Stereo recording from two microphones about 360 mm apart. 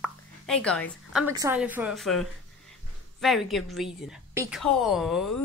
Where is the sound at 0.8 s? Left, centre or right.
Centre.